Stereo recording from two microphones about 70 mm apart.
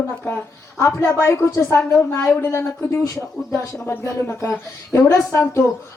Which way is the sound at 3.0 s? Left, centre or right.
Left.